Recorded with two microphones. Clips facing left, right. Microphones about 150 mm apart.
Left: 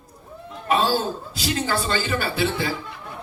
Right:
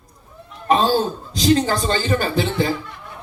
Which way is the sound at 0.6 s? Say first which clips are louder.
Right 4 dB; 45° right (ahead or behind).